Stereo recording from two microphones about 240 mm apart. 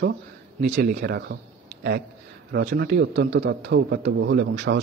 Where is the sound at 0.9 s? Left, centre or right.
Right.